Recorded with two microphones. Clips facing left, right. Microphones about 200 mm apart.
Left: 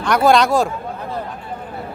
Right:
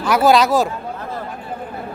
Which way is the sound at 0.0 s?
5° right (ahead or behind).